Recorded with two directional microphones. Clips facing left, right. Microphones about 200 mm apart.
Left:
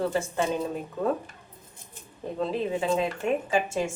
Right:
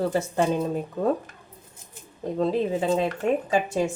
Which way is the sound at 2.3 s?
35° right (ahead or behind).